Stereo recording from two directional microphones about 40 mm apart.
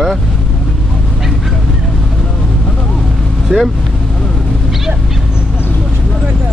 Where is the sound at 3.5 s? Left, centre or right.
Right.